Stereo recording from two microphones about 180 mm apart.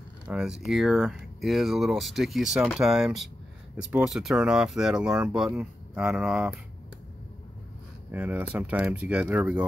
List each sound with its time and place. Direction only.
0.3 s speech: 5° right (ahead or behind)
8.1 s speech: 10° right (ahead or behind)